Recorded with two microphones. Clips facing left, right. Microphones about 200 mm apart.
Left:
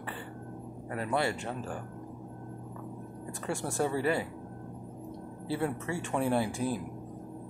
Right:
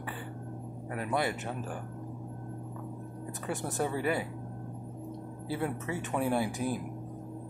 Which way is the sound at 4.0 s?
15° right (ahead or behind).